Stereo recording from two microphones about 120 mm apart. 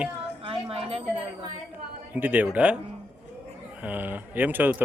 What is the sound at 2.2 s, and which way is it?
Speech, 15° right (ahead or behind).